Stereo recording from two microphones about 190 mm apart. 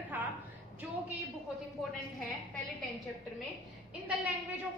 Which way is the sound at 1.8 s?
Centre (ahead or behind).